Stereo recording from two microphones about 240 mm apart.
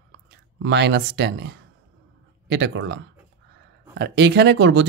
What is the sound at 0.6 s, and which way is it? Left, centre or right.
Speech, right.